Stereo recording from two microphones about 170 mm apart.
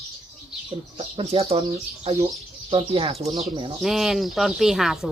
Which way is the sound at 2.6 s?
30° right (ahead or behind).